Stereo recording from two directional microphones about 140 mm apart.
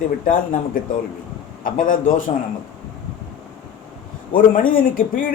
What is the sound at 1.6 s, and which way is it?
Speech, 75° left (ahead or behind).